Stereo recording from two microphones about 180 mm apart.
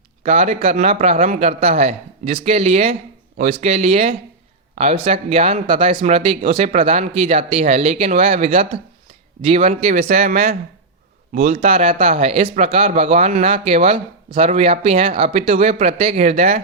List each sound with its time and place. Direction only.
0.2 s speech: 40° right (ahead or behind)